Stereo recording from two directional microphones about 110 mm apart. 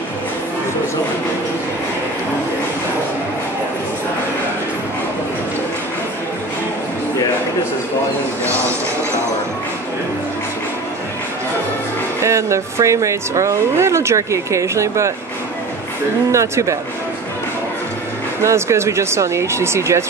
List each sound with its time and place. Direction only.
8.5 s a sound: 25° right (ahead or behind)
12.2 s speech: 25° right (ahead or behind)
16.3 s speech: 25° right (ahead or behind)
18.4 s speech: 25° right (ahead or behind)